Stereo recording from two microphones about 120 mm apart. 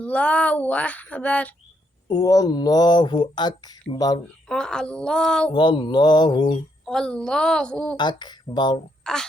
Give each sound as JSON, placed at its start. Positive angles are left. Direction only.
{"t": 0.0, "sound": "speech", "side_deg": 10}
{"t": 2.0, "sound": "speech", "side_deg": 30}
{"t": 4.4, "sound": "a woman's voice", "side_deg": 5}
{"t": 5.5, "sound": "speech", "side_deg": 40}
{"t": 6.8, "sound": "a woman's voice", "side_deg": 5}
{"t": 7.9, "sound": "speech", "side_deg": 40}
{"t": 9.1, "sound": "a woman's voice", "side_deg": 5}